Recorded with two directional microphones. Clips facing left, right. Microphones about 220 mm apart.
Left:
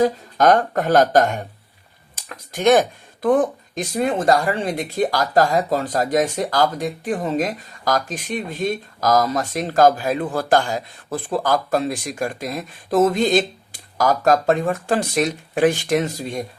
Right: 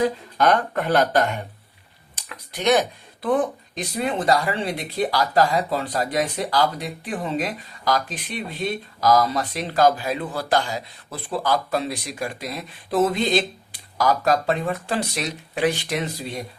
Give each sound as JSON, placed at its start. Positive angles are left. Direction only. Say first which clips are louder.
{"t": 0.0, "sound": "speech", "louder": "left 4 dB", "side_deg": 45}